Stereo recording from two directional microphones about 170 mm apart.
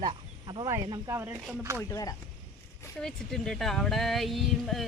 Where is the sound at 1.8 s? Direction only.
20° left (ahead or behind).